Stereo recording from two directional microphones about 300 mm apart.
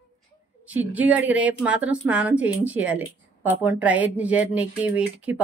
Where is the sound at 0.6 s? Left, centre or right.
Centre.